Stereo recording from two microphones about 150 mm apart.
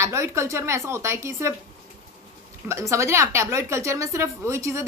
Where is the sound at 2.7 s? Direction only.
20° right (ahead or behind).